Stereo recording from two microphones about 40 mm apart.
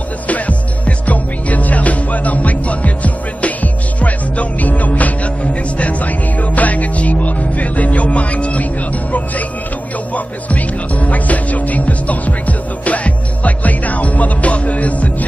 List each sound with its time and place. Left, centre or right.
0.3 s music: left
10.1 s music: left